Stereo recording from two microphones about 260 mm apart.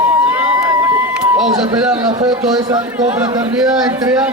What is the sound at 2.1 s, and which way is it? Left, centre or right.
A man's voice, centre.